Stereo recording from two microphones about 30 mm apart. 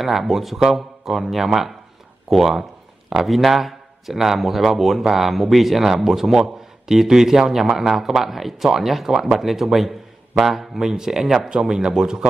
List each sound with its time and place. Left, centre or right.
0.0 s a man's voice: centre
10.8 s speech: centre